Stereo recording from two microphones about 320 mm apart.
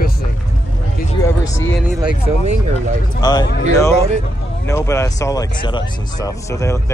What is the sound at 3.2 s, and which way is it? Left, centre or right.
Speech, centre.